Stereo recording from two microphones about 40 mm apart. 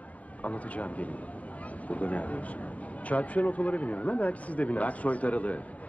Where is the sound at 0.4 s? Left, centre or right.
Left.